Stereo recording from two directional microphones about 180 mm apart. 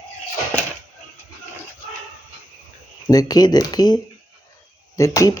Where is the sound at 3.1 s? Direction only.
20° left (ahead or behind).